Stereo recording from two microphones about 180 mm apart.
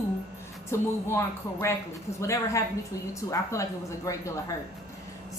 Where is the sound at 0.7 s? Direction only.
15° left (ahead or behind).